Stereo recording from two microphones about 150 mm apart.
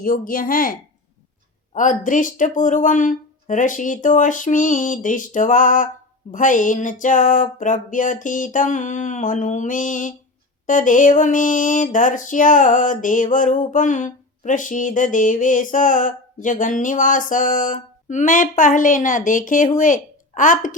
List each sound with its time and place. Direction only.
0.0 s speech: 65° left (ahead or behind)
1.7 s music: 60° left (ahead or behind)